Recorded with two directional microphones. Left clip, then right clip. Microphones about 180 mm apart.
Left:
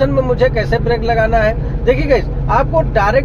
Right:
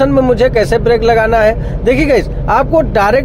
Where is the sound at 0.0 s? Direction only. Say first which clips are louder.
Right 4 dB; 60° right (ahead or behind).